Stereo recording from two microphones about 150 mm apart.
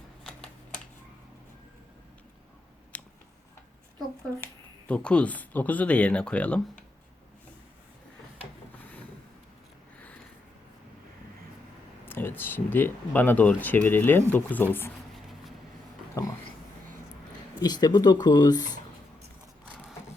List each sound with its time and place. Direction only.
2.9 s a sound: 10° left (ahead or behind)
4.9 s speech: 10° left (ahead or behind)
12.0 s speech: 15° left (ahead or behind)
17.6 s speech: 25° left (ahead or behind)